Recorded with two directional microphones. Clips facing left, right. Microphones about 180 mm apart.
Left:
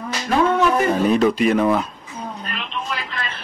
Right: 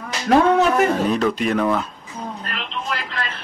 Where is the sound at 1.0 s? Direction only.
5° left (ahead or behind).